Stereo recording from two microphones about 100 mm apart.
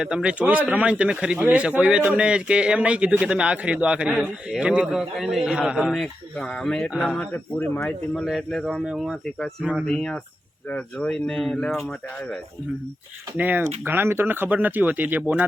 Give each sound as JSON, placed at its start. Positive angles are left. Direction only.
{"t": 0.0, "sound": "a man's voice", "side_deg": -10}
{"t": 5.5, "sound": "a man's voice", "side_deg": -10}
{"t": 6.3, "sound": "speech", "side_deg": 10}
{"t": 7.9, "sound": "a man's voice", "side_deg": 5}
{"t": 13.3, "sound": "speech", "side_deg": -15}